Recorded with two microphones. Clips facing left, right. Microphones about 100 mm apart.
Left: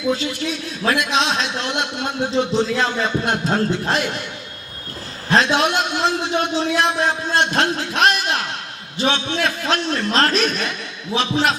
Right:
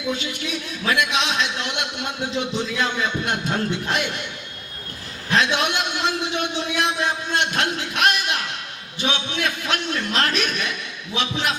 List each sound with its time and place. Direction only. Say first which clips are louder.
0.1 s a man's voice: left 4 dB; 35° left (ahead or behind)
5.3 s a man's voice: left 4 dB; 35° left (ahead or behind)